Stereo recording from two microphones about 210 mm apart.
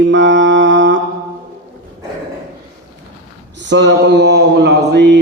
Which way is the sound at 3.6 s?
55° right (ahead or behind).